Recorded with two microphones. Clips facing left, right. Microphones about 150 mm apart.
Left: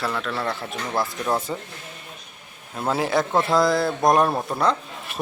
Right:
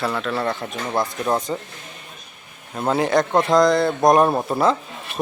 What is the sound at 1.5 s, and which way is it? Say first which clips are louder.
Speech: right 3 dB; centre (ahead or behind).